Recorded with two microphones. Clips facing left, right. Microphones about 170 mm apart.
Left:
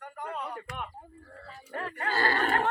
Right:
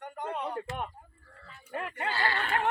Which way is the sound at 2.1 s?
45° left (ahead or behind).